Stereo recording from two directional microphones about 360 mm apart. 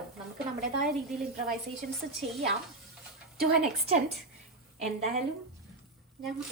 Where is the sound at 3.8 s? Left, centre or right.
Centre.